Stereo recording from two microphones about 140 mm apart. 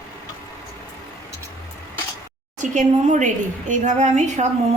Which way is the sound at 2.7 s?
60° right (ahead or behind).